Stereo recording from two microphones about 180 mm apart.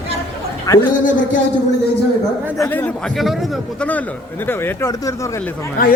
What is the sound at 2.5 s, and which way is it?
A man's voice, 15° left (ahead or behind).